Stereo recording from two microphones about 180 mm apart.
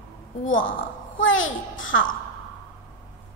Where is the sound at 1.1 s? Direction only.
90° left.